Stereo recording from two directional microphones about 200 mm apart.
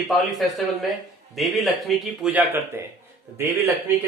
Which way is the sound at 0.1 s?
Centre (ahead or behind).